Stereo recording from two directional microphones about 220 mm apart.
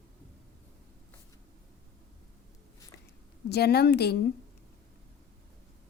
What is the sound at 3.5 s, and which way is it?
Speech, 45° left (ahead or behind).